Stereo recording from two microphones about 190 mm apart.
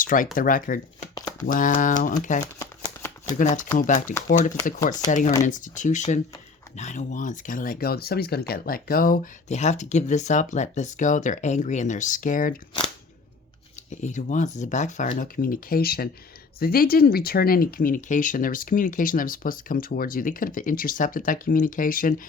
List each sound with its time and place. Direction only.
0.0 s speech: 45° left (ahead or behind)
2.6 s shuffling cards: 20° left (ahead or behind)
3.3 s speech: 40° left (ahead or behind)
13.9 s speech: 40° left (ahead or behind)